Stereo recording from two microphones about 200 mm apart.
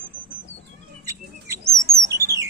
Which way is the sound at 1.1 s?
15° right (ahead or behind).